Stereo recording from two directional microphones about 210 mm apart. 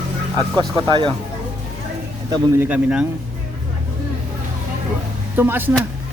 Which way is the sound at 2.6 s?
5° right (ahead or behind).